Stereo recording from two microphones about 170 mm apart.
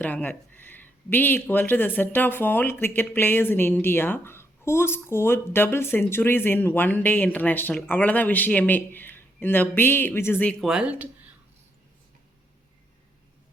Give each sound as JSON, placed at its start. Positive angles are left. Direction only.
{"t": 0.0, "sound": "speech", "side_deg": 10}
{"t": 10.7, "sound": "speech", "side_deg": -5}